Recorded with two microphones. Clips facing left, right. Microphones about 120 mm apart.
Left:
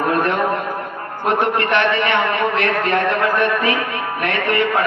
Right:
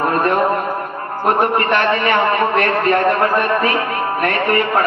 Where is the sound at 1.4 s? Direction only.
40° right (ahead or behind).